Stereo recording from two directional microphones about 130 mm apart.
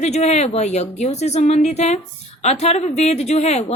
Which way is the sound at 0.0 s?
60° left (ahead or behind).